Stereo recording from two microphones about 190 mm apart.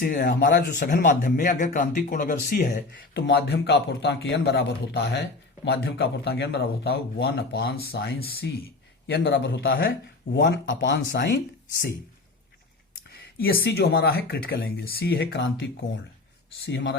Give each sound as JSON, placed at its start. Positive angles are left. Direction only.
{"t": 0.0, "sound": "speech", "side_deg": 50}
{"t": 0.8, "sound": "speech", "side_deg": 45}
{"t": 13.4, "sound": "a man's voice", "side_deg": 55}